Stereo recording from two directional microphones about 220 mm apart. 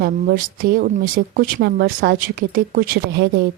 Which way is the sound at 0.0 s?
40° right (ahead or behind).